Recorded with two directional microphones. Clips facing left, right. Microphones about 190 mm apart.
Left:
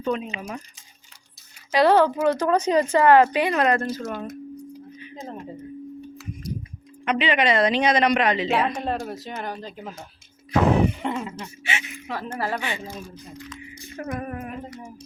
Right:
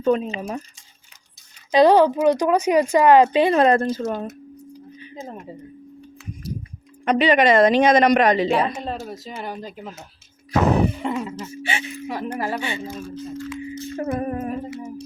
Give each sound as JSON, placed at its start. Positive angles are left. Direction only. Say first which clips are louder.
{"t": 0.0, "sound": "speech", "louder": "right 6 dB", "side_deg": -40}
{"t": 1.8, "sound": "speech", "louder": "right 3 dB", "side_deg": -15}
{"t": 3.4, "sound": "speech", "louder": "right 5 dB", "side_deg": -30}
{"t": 7.0, "sound": "speech", "louder": "right 5 dB", "side_deg": -40}
{"t": 8.4, "sound": "speech", "louder": "right 2 dB", "side_deg": 0}
{"t": 10.6, "sound": "speech", "louder": "right 1 dB", "side_deg": -40}
{"t": 11.0, "sound": "speech", "louder": "right 2 dB", "side_deg": 0}
{"t": 11.6, "sound": "speech", "louder": "right 3 dB", "side_deg": -35}
{"t": 12.0, "sound": "speech", "louder": "right 2 dB", "side_deg": -15}
{"t": 12.5, "sound": "speech", "louder": "right 2 dB", "side_deg": -25}
{"t": 13.0, "sound": "speech", "louder": "right 8 dB", "side_deg": 15}
{"t": 13.9, "sound": "humming", "louder": "right 5 dB", "side_deg": -30}
{"t": 14.7, "sound": "a sound", "louder": "right 8 dB", "side_deg": -5}